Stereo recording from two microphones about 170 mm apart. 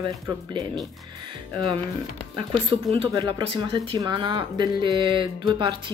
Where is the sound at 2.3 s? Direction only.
30° right (ahead or behind).